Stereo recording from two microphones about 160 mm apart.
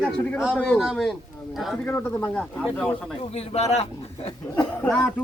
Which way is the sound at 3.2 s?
40° left (ahead or behind).